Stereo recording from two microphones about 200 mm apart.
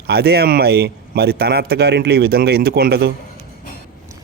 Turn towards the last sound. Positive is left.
turn(degrees=-50)  # may be behind; listen again after turning